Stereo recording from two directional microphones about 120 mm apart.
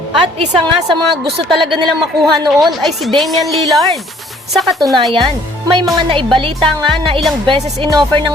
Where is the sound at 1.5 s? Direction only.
45° right (ahead or behind).